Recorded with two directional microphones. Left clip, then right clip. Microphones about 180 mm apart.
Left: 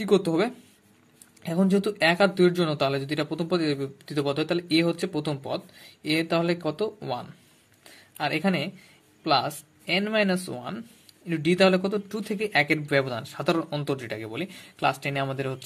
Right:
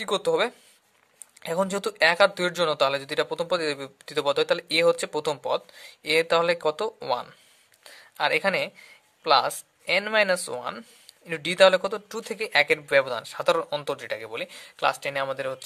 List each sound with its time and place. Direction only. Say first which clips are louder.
0.0 s speech: left 1 dB; 25° right (ahead or behind)